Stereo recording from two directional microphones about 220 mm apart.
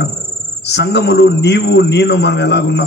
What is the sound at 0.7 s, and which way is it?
A man's voice, 50° left (ahead or behind).